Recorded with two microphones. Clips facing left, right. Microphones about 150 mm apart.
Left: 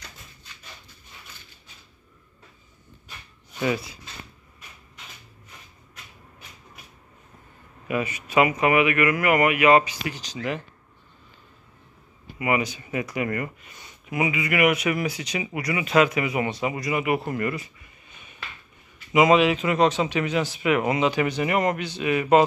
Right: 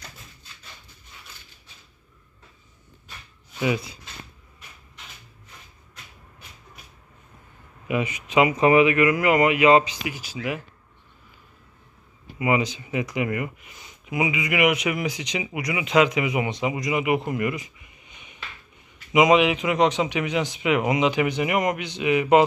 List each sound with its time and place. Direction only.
3.5 s speech: 10° right (ahead or behind)
7.9 s speech: 15° right (ahead or behind)
10.0 s speech: 10° right (ahead or behind)
12.4 s speech: 20° right (ahead or behind)